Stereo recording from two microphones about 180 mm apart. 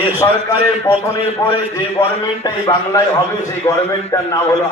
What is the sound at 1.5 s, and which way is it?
A man's voice, 15° left (ahead or behind).